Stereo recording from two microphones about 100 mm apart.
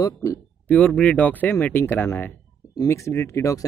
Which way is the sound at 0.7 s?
10° left (ahead or behind).